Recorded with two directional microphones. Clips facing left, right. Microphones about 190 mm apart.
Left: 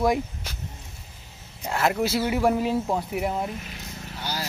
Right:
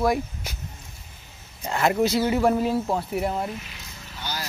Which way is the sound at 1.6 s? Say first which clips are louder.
Right 2 dB; centre (ahead or behind).